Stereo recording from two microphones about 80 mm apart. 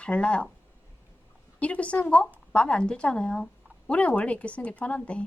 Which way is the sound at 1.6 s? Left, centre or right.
Centre.